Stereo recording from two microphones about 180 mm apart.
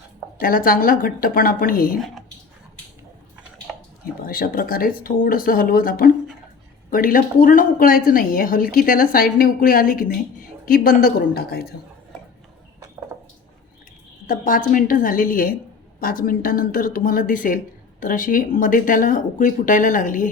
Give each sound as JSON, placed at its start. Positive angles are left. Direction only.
{"t": 0.3, "sound": "a woman's voice", "side_deg": 50}
{"t": 4.3, "sound": "a woman's voice", "side_deg": 55}
{"t": 14.3, "sound": "a woman's voice", "side_deg": 50}